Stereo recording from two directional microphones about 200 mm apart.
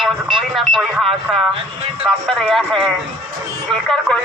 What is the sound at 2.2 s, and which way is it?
Speech, 5° left (ahead or behind).